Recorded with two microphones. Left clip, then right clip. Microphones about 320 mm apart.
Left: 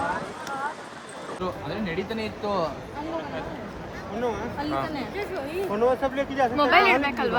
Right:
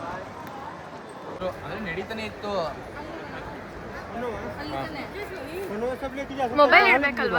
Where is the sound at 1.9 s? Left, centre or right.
Left.